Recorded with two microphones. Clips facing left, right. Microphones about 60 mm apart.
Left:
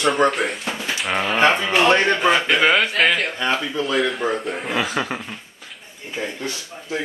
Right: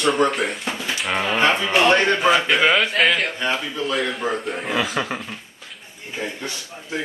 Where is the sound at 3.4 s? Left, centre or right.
Left.